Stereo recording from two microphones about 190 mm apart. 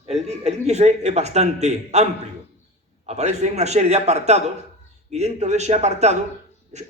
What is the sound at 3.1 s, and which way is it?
A man's voice, 35° right (ahead or behind).